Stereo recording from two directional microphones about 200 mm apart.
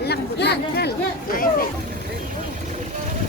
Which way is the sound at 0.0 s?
55° left (ahead or behind).